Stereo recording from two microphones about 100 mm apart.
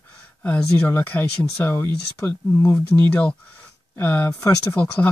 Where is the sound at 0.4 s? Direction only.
15° left (ahead or behind).